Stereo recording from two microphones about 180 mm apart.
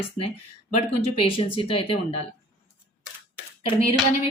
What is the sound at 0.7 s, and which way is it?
A woman's voice, 30° left (ahead or behind).